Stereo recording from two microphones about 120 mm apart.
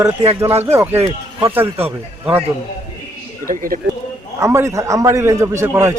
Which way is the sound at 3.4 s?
25° left (ahead or behind).